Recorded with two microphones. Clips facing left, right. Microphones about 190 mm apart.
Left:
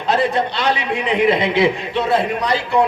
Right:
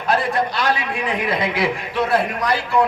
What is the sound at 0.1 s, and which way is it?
A man's voice, 20° left (ahead or behind).